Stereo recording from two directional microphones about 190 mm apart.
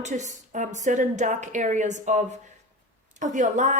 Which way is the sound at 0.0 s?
40° right (ahead or behind).